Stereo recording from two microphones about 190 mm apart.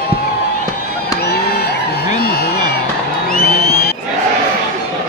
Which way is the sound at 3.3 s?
55° left (ahead or behind).